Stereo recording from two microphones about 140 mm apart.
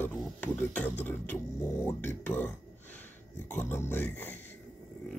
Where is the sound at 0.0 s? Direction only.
15° left (ahead or behind).